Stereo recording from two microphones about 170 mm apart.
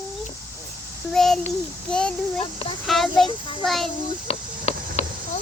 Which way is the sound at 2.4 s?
30° left (ahead or behind).